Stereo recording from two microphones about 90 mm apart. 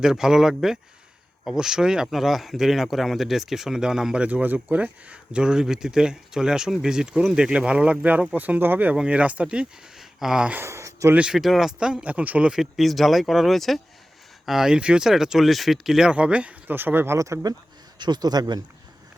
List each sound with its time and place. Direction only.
0.0 s speech: 5° right (ahead or behind)
10.6 s a sound: 35° right (ahead or behind)
11.1 s speech: 10° right (ahead or behind)
12.5 s speech: 5° right (ahead or behind); by 17.2 s 25° right (ahead or behind)
17.2 s speech: 35° right (ahead or behind)
18.0 s speech: 50° right (ahead or behind)